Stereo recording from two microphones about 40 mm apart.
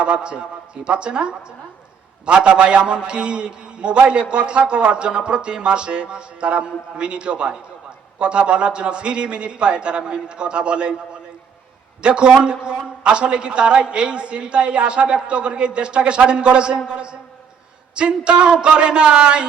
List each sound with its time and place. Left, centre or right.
0.0 s a man's voice: right